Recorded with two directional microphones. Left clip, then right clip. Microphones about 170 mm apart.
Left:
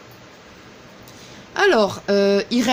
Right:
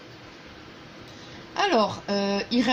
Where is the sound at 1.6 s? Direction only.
90° left.